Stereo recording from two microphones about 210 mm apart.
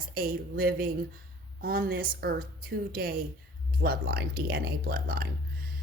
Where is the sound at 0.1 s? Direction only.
45° right (ahead or behind).